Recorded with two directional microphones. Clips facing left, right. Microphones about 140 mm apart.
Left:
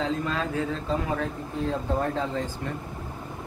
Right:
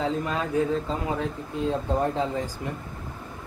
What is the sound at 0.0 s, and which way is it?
Speech, 20° right (ahead or behind).